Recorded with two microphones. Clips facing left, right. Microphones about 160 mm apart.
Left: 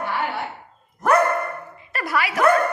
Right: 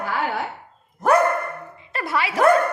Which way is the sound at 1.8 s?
25° right (ahead or behind).